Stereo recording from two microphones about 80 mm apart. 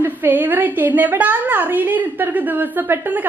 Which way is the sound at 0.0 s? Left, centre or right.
Right.